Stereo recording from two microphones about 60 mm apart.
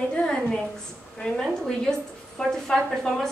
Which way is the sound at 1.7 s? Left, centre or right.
Centre.